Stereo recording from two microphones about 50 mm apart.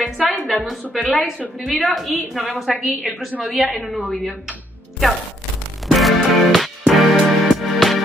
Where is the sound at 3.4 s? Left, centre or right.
Centre.